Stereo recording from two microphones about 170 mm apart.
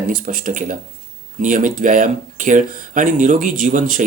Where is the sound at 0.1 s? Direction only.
55° right (ahead or behind).